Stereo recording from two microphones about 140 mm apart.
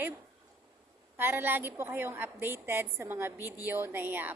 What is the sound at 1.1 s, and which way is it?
A woman's voice, 15° right (ahead or behind).